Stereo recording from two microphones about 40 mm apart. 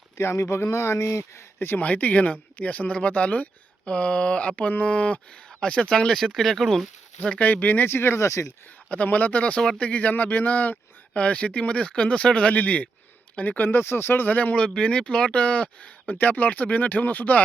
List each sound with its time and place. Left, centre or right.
0.3 s speech: left
1.5 s speech: left
1.8 s speech: left
3.8 s speech: left
5.5 s speech: left
6.1 s speech: centre
7.3 s speech: left
7.9 s speech: left
9.0 s speech: left
11.1 s speech: left
13.6 s speech: left
14.8 s speech: left
16.1 s speech: left